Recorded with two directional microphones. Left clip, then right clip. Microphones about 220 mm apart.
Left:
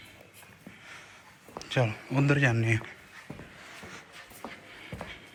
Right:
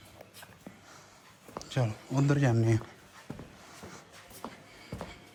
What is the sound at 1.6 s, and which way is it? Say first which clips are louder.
Speech: left 6 dB; 10° right (ahead or behind).